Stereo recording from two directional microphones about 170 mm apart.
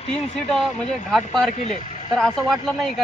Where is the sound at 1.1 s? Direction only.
Centre (ahead or behind).